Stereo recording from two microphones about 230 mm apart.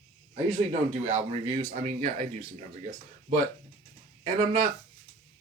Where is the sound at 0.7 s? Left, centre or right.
Right.